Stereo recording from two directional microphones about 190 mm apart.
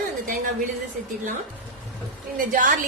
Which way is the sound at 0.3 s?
45° right (ahead or behind).